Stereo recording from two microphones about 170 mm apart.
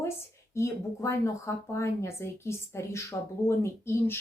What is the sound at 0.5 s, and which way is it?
A woman's voice, 15° left (ahead or behind).